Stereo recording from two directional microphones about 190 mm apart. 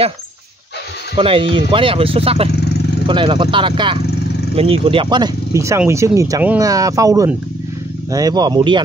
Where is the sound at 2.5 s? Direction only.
60° left (ahead or behind).